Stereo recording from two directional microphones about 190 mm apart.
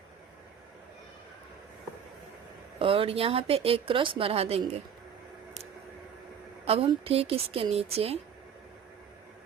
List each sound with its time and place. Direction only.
2.7 s speech: 30° right (ahead or behind)
6.7 s speech: 30° right (ahead or behind)